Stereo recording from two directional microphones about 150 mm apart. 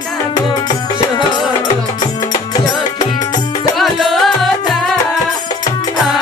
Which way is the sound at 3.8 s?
Centre (ahead or behind).